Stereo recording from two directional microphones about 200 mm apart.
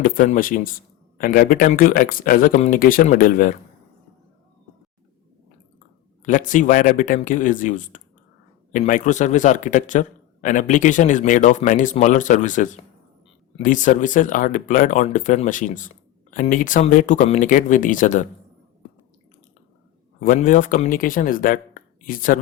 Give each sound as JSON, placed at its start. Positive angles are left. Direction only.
{"t": 0.0, "sound": "speech", "side_deg": 40}
{"t": 6.2, "sound": "a man's voice", "side_deg": 40}
{"t": 20.1, "sound": "speech", "side_deg": 40}